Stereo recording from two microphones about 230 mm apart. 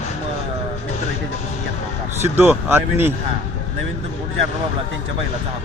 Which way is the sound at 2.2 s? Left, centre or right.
Centre.